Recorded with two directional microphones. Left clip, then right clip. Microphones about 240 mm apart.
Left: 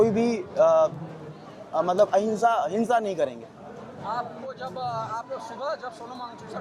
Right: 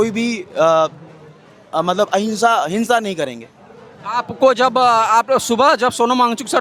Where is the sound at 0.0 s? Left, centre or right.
Right.